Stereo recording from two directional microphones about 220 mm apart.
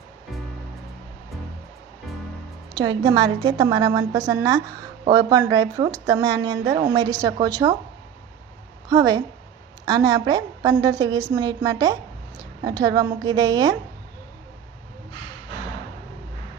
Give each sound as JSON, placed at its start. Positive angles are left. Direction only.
{"t": 2.7, "sound": "a woman's voice", "side_deg": -15}
{"t": 8.9, "sound": "a woman's voice", "side_deg": -15}